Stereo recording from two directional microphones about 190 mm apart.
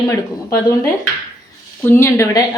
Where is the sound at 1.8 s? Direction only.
10° left (ahead or behind).